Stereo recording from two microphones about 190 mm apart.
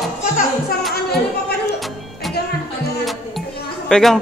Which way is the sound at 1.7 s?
Centre (ahead or behind).